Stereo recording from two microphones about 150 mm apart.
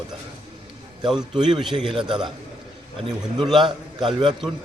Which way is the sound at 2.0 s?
5° right (ahead or behind).